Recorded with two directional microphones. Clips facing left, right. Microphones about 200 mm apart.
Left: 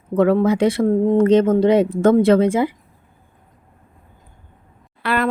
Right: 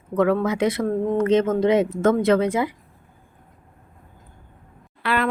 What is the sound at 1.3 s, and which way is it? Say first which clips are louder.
Speech: left 2 dB; 30° left (ahead or behind).